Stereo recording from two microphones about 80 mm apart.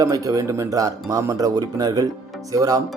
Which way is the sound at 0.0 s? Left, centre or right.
Right.